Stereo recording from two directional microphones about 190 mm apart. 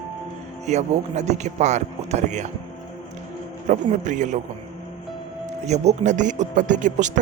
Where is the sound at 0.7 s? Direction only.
35° right (ahead or behind).